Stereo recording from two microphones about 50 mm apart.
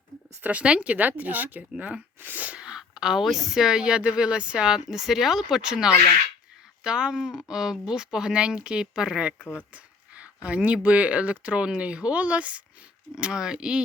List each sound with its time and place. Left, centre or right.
0.4 s speech: right
1.8 s speech: right
2.2 s sneeze: right
2.5 s a woman's voice: centre